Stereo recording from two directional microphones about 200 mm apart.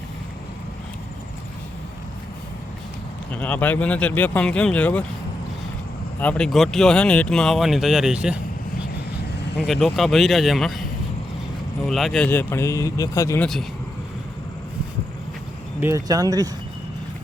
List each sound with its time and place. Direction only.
3.3 s speech: 10° left (ahead or behind)
6.1 s speech: 5° left (ahead or behind)
9.6 s speech: centre (ahead or behind)
11.9 s speech: centre (ahead or behind)
15.8 s speech: 15° right (ahead or behind)